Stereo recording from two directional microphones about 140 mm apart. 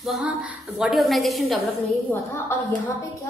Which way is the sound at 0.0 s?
5° right (ahead or behind).